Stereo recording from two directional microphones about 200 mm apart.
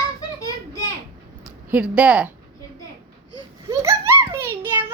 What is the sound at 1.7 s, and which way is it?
Speech, 5° right (ahead or behind).